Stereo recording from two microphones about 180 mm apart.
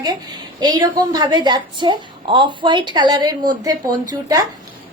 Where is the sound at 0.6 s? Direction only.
20° right (ahead or behind).